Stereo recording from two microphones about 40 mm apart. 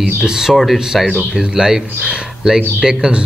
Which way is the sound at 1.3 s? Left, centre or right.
Centre.